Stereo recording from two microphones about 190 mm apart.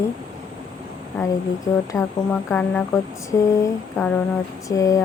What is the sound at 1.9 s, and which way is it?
Speech, 15° left (ahead or behind).